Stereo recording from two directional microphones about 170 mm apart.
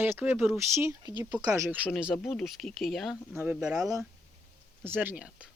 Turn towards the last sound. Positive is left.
turn(degrees=-5)  # may be behind; listen again after turning